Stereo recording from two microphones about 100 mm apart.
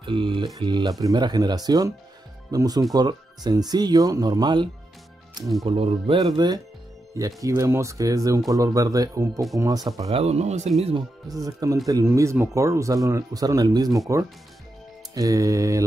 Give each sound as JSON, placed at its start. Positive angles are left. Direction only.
{"t": 0.0, "sound": "speech", "side_deg": -55}
{"t": 0.6, "sound": "speech", "side_deg": -45}
{"t": 5.7, "sound": "speech", "side_deg": -70}
{"t": 6.3, "sound": "speech", "side_deg": -45}
{"t": 7.2, "sound": "speech", "side_deg": -35}
{"t": 10.0, "sound": "speech", "side_deg": -90}
{"t": 10.8, "sound": "speech", "side_deg": -75}
{"t": 11.2, "sound": "speech", "side_deg": -35}